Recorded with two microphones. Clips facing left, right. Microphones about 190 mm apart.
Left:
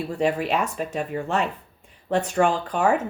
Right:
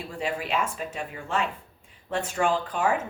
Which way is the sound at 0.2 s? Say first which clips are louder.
Left 5 dB; 40° left (ahead or behind).